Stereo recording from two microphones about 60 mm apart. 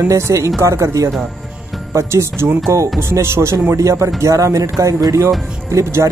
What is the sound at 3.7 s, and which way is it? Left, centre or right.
Speech, right.